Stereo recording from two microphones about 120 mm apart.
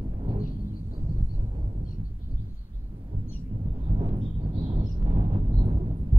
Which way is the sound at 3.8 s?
50° right (ahead or behind).